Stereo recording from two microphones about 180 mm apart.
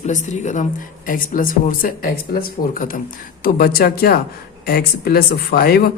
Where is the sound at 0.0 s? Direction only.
40° left (ahead or behind).